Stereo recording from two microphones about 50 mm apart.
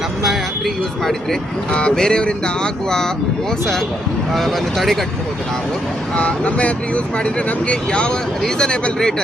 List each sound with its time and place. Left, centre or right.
0.3 s speech: centre
1.7 s speech: centre
4.4 s speech: centre
6.1 s speech: left